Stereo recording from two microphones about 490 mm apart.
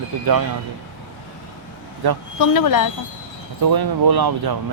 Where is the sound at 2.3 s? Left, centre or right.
Left.